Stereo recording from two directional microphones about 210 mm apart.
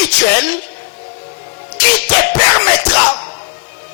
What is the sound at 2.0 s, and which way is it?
Music, 10° left (ahead or behind).